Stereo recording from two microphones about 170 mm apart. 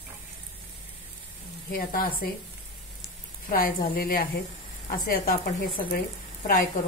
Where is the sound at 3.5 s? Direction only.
55° left (ahead or behind).